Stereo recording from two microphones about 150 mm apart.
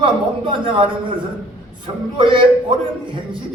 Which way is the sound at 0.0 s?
35° right (ahead or behind).